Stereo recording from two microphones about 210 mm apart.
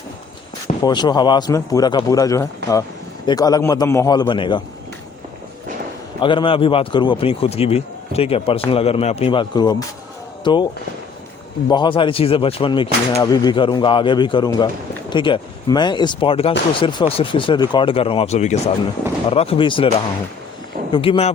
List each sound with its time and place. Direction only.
0.8 s a man's voice: 20° left (ahead or behind)
6.1 s speech: 25° left (ahead or behind)
11.7 s speech: 20° left (ahead or behind)
20.9 s speech: 25° left (ahead or behind)